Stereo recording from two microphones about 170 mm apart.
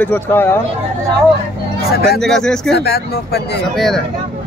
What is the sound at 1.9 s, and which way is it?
Speech, 65° left (ahead or behind).